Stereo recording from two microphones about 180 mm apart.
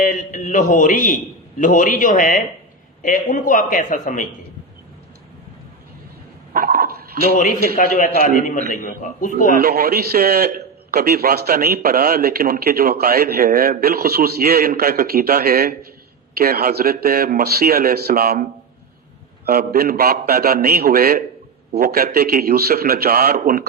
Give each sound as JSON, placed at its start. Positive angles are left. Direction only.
{"t": 0.0, "sound": "a man's voice", "side_deg": 45}
{"t": 6.5, "sound": "dog", "side_deg": -55}
{"t": 7.3, "sound": "a man's voice", "side_deg": 45}
{"t": 9.6, "sound": "a man's voice", "side_deg": -60}
{"t": 19.5, "sound": "a man's voice", "side_deg": -55}